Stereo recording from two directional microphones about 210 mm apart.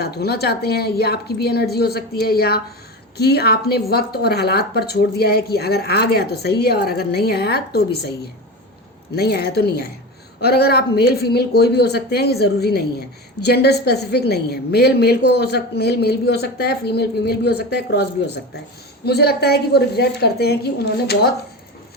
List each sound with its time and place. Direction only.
0.0 s a woman's voice: 50° left (ahead or behind)
9.1 s a woman's voice: 50° left (ahead or behind)
19.0 s a woman's voice: 50° left (ahead or behind)